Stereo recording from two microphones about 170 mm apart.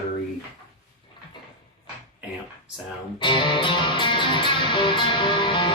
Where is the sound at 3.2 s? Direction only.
30° left (ahead or behind).